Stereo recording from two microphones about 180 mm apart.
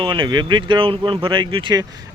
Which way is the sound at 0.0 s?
25° right (ahead or behind).